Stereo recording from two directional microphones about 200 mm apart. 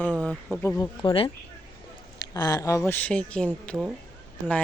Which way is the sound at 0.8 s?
25° left (ahead or behind).